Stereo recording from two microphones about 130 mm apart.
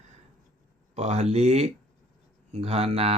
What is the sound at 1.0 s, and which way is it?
Speech, 60° right (ahead or behind).